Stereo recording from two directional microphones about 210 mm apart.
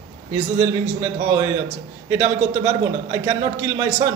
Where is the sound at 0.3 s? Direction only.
20° right (ahead or behind).